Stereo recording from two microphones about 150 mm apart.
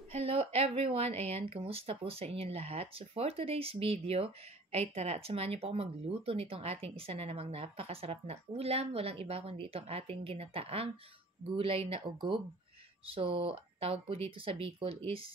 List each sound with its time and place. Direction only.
0.1 s speech: 40° right (ahead or behind)